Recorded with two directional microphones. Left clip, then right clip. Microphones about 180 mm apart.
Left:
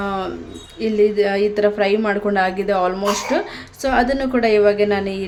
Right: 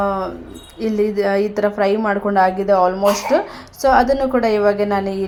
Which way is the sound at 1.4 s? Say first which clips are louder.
Left 1 dB; 10° left (ahead or behind).